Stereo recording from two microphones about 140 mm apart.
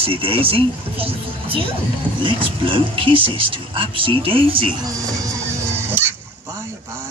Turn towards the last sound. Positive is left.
turn(degrees=-15)  # may be behind; listen again after turning